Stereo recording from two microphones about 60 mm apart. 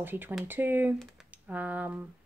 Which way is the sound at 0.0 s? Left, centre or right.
Right.